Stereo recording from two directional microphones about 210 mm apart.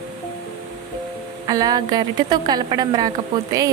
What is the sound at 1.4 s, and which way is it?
A woman's voice, 20° right (ahead or behind).